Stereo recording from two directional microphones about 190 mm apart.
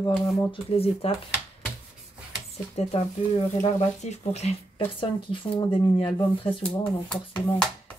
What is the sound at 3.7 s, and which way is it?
Speech, 35° left (ahead or behind).